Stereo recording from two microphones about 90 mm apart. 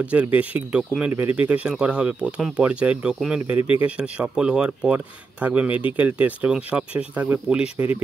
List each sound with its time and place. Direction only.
0.0 s speech: 15° right (ahead or behind)